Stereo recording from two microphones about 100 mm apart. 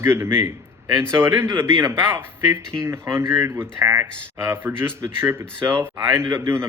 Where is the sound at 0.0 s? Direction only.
20° right (ahead or behind).